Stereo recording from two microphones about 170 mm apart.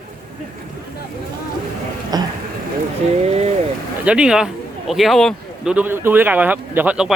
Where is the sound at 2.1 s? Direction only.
25° right (ahead or behind).